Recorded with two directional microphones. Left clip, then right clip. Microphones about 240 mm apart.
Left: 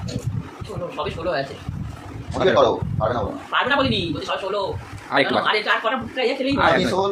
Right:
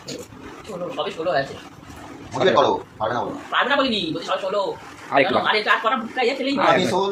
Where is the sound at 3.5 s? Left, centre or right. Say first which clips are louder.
Right 1 dB; centre.